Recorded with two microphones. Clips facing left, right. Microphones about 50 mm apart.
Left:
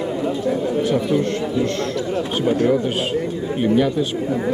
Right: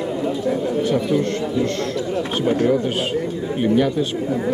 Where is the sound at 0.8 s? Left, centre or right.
Centre.